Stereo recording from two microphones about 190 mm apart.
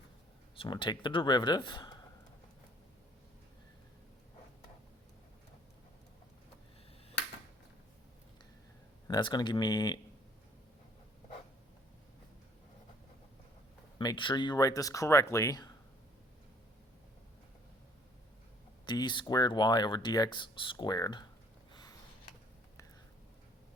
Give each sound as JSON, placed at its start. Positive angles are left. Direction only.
{"t": 0.5, "sound": "speech", "side_deg": 25}
{"t": 9.0, "sound": "speech", "side_deg": 20}
{"t": 14.0, "sound": "speech", "side_deg": 25}
{"t": 18.9, "sound": "speech", "side_deg": 25}
{"t": 21.7, "sound": "a sound", "side_deg": 20}